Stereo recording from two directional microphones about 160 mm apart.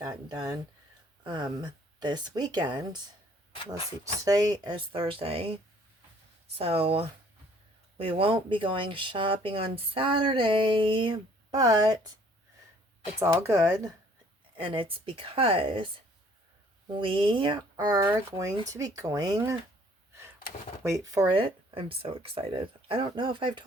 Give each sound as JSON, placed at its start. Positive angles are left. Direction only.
{"t": 0.0, "sound": "speech", "side_deg": -25}
{"t": 4.2, "sound": "speech", "side_deg": -20}
{"t": 6.6, "sound": "speech", "side_deg": -35}
{"t": 13.1, "sound": "speech", "side_deg": -15}
{"t": 14.5, "sound": "speech", "side_deg": -35}
{"t": 16.9, "sound": "speech", "side_deg": -35}
{"t": 20.8, "sound": "speech", "side_deg": -20}